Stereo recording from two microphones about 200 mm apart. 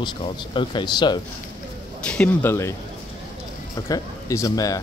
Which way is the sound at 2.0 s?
5° left (ahead or behind).